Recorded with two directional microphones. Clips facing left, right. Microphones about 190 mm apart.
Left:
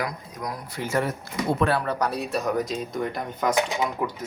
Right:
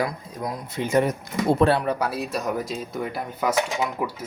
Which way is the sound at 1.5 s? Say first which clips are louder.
Right 4 dB; 30° right (ahead or behind).